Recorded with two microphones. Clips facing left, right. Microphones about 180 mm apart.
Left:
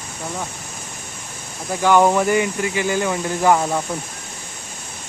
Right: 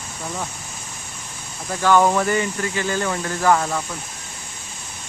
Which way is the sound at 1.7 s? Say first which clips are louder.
Left 2 dB; 15° left (ahead or behind).